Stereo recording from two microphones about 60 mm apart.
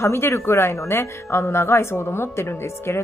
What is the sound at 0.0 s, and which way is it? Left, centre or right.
Speech, left.